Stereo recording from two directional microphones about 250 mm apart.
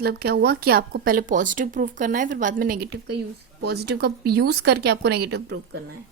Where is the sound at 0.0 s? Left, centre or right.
Right.